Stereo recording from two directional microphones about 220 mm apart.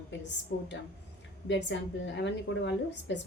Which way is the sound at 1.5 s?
55° left (ahead or behind).